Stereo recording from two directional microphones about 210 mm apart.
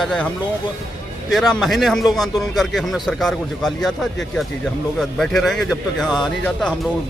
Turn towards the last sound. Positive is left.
turn(degrees=5)  # may be behind; listen again after turning